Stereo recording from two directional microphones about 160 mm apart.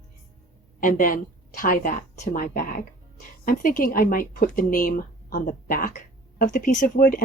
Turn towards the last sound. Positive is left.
turn(degrees=60)  # may be behind; listen again after turning